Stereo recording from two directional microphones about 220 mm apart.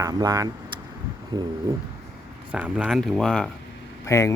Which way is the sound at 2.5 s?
5° right (ahead or behind).